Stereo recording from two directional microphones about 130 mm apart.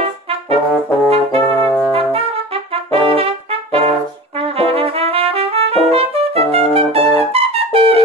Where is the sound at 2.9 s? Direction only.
50° right (ahead or behind).